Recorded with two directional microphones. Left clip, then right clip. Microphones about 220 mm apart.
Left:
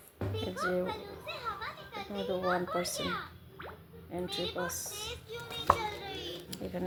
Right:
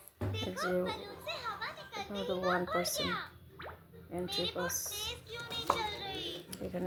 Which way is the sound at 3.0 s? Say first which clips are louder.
Even; 35° right (ahead or behind).